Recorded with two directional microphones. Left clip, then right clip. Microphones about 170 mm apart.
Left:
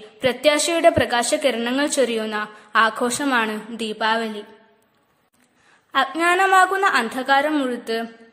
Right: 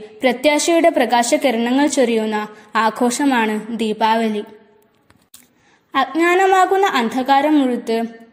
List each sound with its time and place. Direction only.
0.2 s a woman's voice: centre (ahead or behind)
5.9 s a woman's voice: 5° right (ahead or behind)